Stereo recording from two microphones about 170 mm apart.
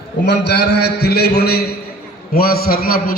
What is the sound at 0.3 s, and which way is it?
A man's voice, 80° left.